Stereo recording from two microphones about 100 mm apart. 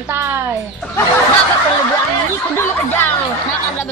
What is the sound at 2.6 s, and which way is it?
Speech, 20° left (ahead or behind).